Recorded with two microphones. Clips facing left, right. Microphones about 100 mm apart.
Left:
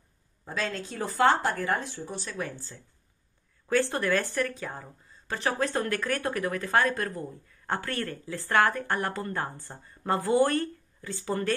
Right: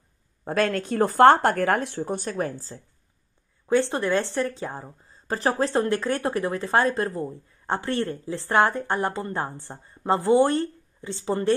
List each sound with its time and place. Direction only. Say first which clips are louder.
0.5 s speech: right 9 dB; 55° right (ahead or behind); by 2.8 s 40° right (ahead or behind)
3.6 s speech: right 4 dB; 20° right (ahead or behind)